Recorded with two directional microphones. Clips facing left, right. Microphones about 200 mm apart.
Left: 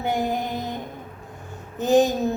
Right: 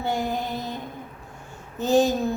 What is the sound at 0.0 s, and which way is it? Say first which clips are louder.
Child singing: left 2 dB; 20° left (ahead or behind).